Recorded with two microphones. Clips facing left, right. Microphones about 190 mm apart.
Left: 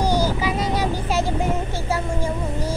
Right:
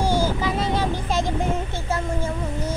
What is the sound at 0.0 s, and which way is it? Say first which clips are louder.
Child singing: left 1 dB; 40° left (ahead or behind).